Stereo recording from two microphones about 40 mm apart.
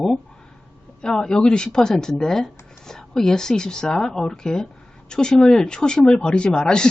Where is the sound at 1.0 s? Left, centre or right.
Centre.